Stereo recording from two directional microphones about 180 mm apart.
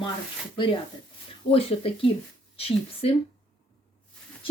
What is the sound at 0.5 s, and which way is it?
Speech, 30° left (ahead or behind).